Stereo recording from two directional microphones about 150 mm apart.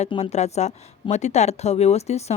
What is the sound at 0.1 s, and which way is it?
Speech, 45° left (ahead or behind).